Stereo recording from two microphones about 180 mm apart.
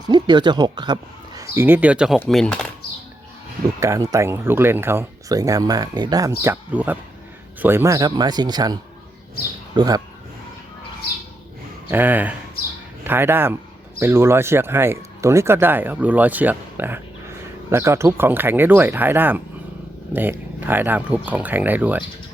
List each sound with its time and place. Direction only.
0.1 s speech: 25° right (ahead or behind)
1.4 s speech: 10° right (ahead or behind); by 2.6 s 5° left (ahead or behind)
3.8 s speech: 15° right (ahead or behind)
11.9 s speech: 10° right (ahead or behind)